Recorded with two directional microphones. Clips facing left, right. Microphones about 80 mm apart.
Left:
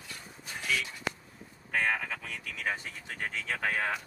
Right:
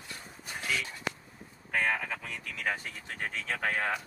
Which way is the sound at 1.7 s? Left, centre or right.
Centre.